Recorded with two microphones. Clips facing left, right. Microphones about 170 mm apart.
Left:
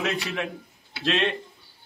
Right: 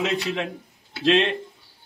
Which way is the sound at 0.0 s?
20° right (ahead or behind).